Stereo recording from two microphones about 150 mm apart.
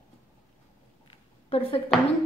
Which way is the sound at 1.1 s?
40° left (ahead or behind).